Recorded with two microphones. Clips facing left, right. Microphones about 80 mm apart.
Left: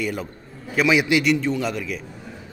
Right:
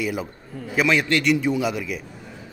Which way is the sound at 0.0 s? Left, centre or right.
Centre.